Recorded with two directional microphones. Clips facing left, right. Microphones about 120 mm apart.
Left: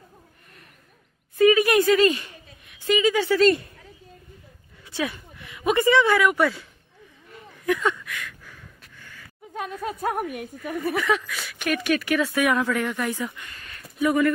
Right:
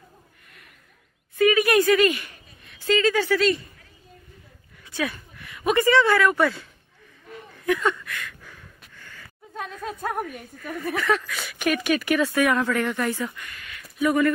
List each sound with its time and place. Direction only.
1.4 s speech: 25° left (ahead or behind)
2.6 s a woman's voice: 10° left (ahead or behind)
4.9 s speech: 20° left (ahead or behind)
7.5 s a sound: 5° left (ahead or behind)
10.6 s speech: 15° left (ahead or behind)
11.3 s speech: 5° right (ahead or behind)
13.4 s a sound: 30° left (ahead or behind)